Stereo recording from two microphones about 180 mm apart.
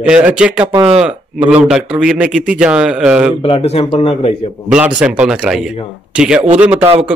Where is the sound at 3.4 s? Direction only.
30° left (ahead or behind).